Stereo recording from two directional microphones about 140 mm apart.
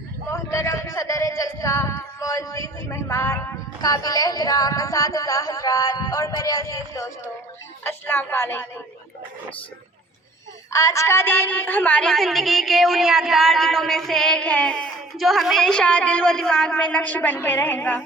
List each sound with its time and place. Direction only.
0.3 s a woman's voice: 20° left (ahead or behind)
10.7 s a woman's voice: 20° left (ahead or behind)